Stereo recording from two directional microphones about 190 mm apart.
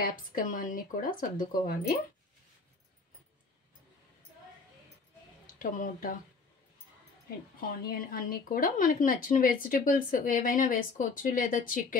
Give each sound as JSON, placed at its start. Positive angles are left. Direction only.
{"t": 0.1, "sound": "a woman's voice", "side_deg": 45}
{"t": 5.6, "sound": "a woman's voice", "side_deg": 45}
{"t": 7.6, "sound": "a woman's voice", "side_deg": 50}